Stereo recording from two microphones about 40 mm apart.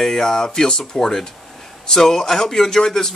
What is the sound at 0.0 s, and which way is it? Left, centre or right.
A man's voice, centre.